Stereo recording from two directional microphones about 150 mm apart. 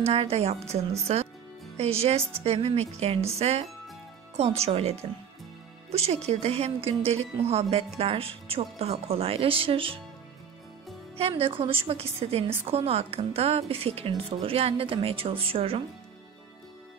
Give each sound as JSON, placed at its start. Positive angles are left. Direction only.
{"t": 0.0, "sound": "a woman's voice", "side_deg": -40}
{"t": 11.1, "sound": "a woman's voice", "side_deg": -40}